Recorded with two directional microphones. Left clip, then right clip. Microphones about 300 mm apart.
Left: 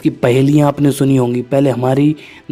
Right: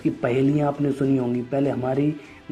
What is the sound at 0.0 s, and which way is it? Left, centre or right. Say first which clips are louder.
Speech: left 9 dB; left.